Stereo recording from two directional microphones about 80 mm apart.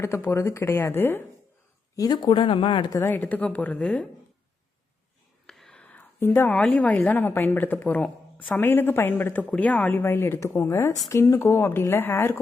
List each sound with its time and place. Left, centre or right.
0.0 s speech: left
2.0 s speech: left
3.0 s a woman's voice: left
5.5 s whispering: centre
6.1 s a woman's voice: left